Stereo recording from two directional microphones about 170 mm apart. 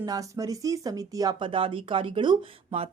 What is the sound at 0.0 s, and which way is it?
A woman's voice, 20° right (ahead or behind).